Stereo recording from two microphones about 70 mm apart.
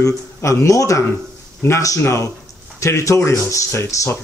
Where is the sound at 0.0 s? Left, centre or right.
Left.